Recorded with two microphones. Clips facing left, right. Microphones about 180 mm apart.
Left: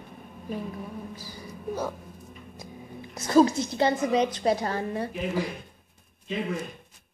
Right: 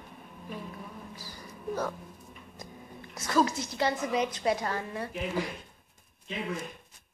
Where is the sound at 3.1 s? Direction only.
30° left (ahead or behind).